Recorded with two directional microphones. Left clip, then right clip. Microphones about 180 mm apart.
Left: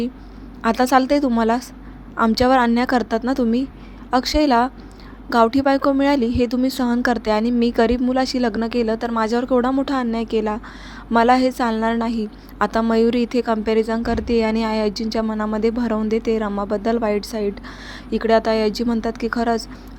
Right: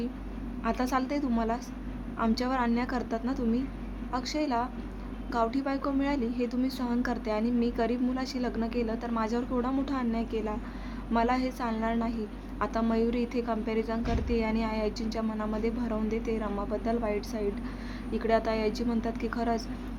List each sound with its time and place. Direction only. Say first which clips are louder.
0.6 s a woman's voice: left 14 dB; 45° left (ahead or behind)